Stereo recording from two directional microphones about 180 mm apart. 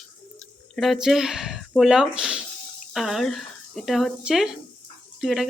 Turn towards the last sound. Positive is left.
turn(degrees=0)  # may be behind; listen again after turning